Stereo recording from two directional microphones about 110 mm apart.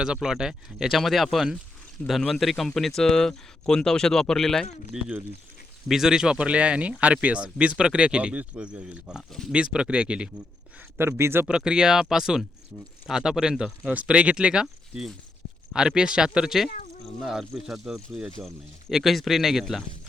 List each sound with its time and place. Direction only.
0.0 s speech: 5° right (ahead or behind)
4.9 s speech: 5° right (ahead or behind)
10.8 s speech: 20° right (ahead or behind)
11.4 s speech: 5° right (ahead or behind)